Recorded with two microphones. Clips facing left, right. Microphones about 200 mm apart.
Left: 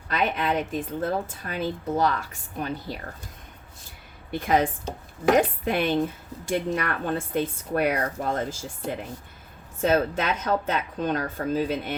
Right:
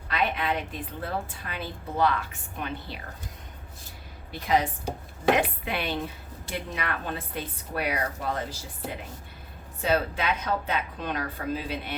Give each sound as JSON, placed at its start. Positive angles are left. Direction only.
{"t": 0.1, "sound": "a woman's voice", "side_deg": 45}
{"t": 4.3, "sound": "speech", "side_deg": 50}
{"t": 9.8, "sound": "speech", "side_deg": 45}